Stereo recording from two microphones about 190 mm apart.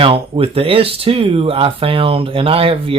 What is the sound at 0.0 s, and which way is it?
Speech, 30° right (ahead or behind).